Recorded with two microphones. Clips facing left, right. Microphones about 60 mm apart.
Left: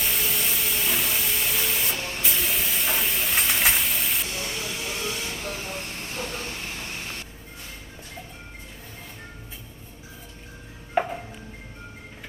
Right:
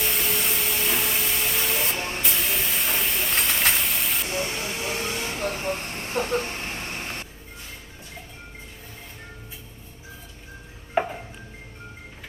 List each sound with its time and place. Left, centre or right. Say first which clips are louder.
0.0 s a sound: right 2 dB; centre
2.0 s spray: right 3 dB; right
2.2 s spray: right 1 dB; centre
4.3 s vehicle: right 4 dB; right
11.0 s music: even; centre